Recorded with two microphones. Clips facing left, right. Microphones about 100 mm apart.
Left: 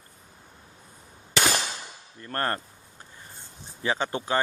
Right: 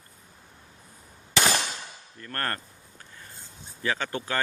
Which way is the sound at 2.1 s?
25° left (ahead or behind).